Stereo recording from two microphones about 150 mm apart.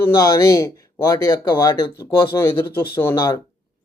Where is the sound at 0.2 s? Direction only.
20° left (ahead or behind).